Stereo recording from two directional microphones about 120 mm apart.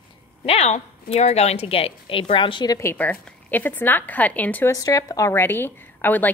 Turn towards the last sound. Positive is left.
turn(degrees=15)  # may be behind; listen again after turning